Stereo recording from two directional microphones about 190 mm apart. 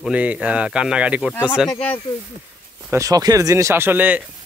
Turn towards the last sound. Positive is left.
turn(degrees=-10)  # may be behind; listen again after turning